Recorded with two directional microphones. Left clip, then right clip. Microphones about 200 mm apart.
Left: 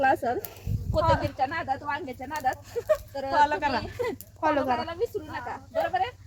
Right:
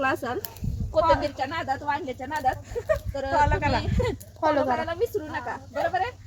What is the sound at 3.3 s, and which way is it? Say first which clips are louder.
Speech: even; 15° left (ahead or behind).